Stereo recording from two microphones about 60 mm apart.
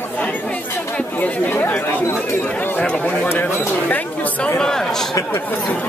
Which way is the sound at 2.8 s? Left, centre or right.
Centre.